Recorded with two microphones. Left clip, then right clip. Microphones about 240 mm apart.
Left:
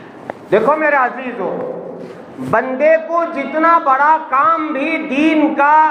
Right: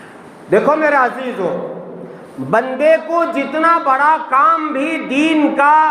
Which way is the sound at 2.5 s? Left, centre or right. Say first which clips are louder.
Even; right.